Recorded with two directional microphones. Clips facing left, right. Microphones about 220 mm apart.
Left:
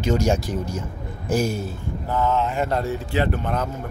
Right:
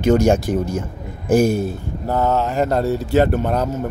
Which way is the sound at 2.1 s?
40° right (ahead or behind).